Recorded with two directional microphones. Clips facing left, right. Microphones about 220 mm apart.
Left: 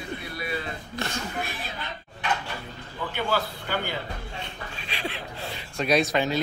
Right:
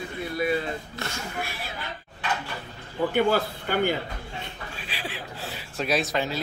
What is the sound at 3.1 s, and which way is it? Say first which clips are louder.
Speech: right 4 dB; 50° right (ahead or behind).